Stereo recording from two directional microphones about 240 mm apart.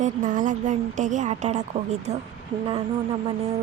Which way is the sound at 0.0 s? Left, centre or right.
Right.